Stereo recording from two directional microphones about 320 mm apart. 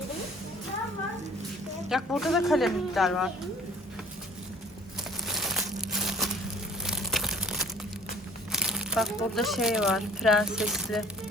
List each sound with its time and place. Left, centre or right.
1.9 s speech: centre
5.2 s crumpling: centre
6.8 s a sound: centre
8.5 s speech: centre